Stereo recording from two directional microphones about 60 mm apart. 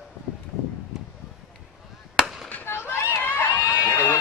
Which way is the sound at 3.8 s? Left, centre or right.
Left.